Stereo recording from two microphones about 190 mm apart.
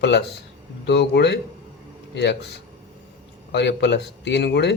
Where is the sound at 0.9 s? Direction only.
65° left (ahead or behind).